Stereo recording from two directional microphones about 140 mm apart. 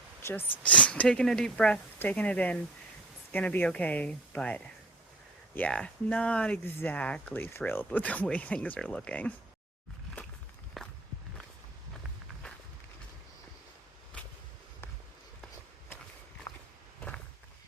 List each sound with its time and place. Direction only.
0.2 s speech: 20° left (ahead or behind)
10.8 s walk: centre (ahead or behind)
16.5 s walk: 25° left (ahead or behind)